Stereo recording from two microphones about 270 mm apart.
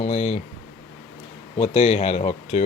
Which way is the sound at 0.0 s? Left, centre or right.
Left.